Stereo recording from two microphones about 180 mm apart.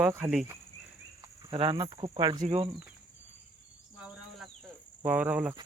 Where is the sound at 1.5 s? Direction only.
30° right (ahead or behind).